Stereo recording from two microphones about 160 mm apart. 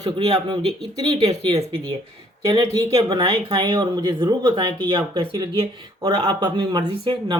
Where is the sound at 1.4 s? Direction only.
35° right (ahead or behind).